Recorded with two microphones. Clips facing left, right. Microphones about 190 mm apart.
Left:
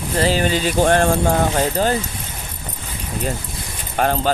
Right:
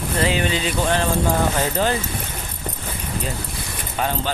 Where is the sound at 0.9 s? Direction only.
55° left (ahead or behind).